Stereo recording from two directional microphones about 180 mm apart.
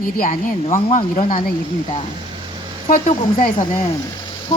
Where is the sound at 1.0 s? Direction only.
30° left (ahead or behind).